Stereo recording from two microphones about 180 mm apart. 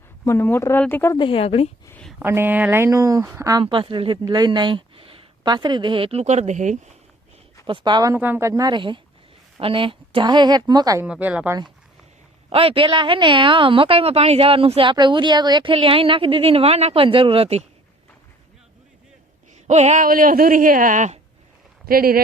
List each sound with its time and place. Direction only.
0.3 s speech: 10° left (ahead or behind)
1.1 s a woman's voice: 30° left (ahead or behind)
1.9 s speech: 5° left (ahead or behind)
2.1 s a woman's voice: 10° right (ahead or behind); by 6.9 s 40° right (ahead or behind)
7.7 s a woman's voice: 25° right (ahead or behind)
8.1 s a woman's voice: 10° right (ahead or behind)
11.0 s speech: 5° right (ahead or behind)
12.5 s a woman's voice: 30° right (ahead or behind)
19.6 s speech: 40° right (ahead or behind)
21.8 s speech: 55° right (ahead or behind)